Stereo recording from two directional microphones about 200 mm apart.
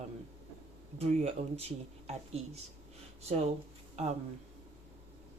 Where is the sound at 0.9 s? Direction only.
30° right (ahead or behind).